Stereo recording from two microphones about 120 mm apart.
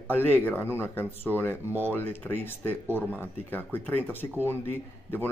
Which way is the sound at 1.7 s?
15° right (ahead or behind).